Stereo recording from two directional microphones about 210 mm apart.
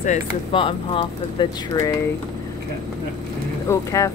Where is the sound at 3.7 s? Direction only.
15° left (ahead or behind).